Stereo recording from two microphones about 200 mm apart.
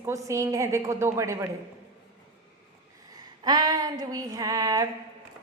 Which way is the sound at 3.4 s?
20° right (ahead or behind).